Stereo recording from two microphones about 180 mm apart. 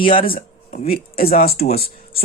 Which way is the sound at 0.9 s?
55° left (ahead or behind).